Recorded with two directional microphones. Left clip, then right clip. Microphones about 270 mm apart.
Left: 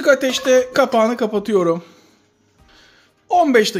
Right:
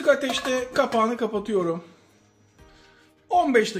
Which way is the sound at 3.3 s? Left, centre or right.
Left.